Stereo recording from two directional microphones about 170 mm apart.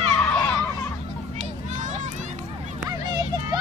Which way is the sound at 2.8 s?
20° right (ahead or behind).